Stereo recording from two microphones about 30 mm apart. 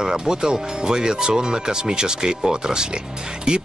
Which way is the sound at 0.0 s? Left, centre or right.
Right.